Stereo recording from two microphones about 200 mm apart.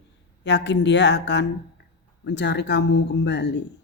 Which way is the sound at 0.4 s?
60° left (ahead or behind).